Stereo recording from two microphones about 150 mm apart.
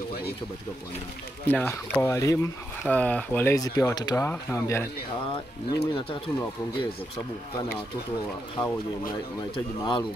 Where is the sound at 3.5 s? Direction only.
25° left (ahead or behind).